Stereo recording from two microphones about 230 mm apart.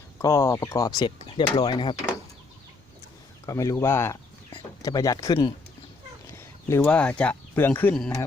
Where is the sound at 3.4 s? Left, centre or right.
Centre.